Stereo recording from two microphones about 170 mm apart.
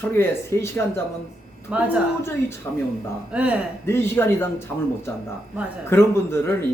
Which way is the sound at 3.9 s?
15° left (ahead or behind).